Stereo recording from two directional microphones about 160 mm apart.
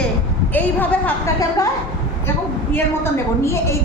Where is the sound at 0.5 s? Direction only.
10° left (ahead or behind).